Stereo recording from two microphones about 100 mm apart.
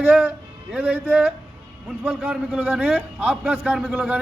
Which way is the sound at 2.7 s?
15° right (ahead or behind).